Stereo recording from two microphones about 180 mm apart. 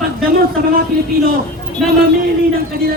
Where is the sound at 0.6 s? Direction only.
55° right (ahead or behind).